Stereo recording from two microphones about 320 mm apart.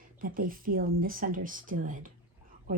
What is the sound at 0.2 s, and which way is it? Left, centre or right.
Speech, right.